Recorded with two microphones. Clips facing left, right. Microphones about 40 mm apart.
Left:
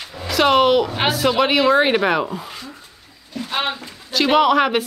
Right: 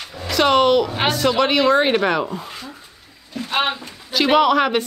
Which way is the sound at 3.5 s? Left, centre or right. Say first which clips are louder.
Right 3 dB; centre.